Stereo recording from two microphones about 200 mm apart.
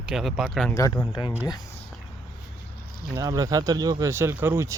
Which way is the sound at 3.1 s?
20° right (ahead or behind).